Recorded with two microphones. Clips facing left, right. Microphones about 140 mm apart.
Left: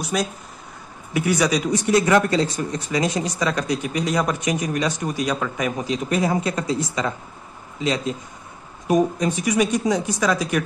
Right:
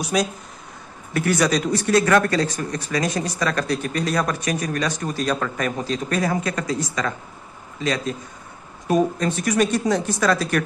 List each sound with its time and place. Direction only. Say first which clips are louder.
0.0 s a man's voice: right 2 dB; centre (ahead or behind)